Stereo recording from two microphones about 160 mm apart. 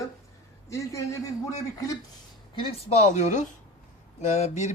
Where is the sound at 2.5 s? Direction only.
35° left (ahead or behind).